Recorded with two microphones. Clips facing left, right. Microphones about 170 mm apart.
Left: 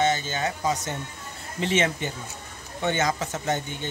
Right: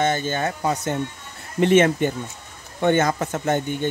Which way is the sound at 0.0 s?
55° right (ahead or behind).